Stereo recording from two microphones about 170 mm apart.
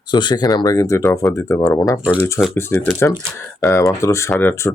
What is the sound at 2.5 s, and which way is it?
Speech, 15° left (ahead or behind).